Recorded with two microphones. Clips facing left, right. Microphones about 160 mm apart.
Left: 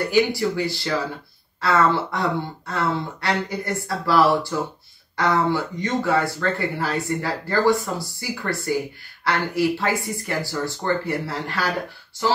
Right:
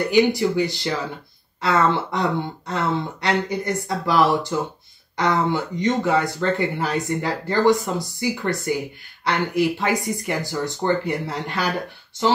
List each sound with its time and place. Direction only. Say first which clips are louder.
0.1 s speech: right 3 dB; 20° right (ahead or behind)